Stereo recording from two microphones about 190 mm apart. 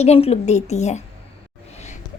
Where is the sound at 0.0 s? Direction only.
35° left (ahead or behind).